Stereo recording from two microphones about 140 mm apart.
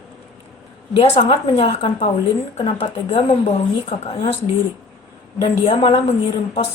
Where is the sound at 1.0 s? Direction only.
45° left (ahead or behind).